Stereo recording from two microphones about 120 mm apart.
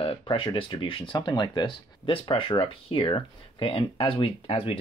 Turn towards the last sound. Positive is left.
turn(degrees=50)  # may be behind; listen again after turning